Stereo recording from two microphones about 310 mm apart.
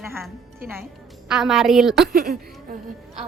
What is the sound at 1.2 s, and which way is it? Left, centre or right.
Child singing, centre.